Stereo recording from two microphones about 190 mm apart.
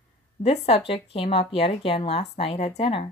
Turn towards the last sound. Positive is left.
turn(degrees=30)  # may be behind; listen again after turning